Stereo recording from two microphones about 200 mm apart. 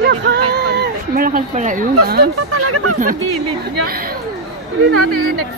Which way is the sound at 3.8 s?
50° right (ahead or behind).